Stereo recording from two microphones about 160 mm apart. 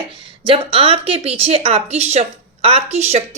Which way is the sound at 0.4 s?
35° right (ahead or behind).